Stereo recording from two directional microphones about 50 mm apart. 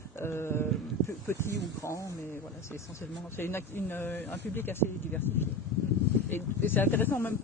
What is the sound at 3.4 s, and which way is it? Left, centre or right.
Speech, left.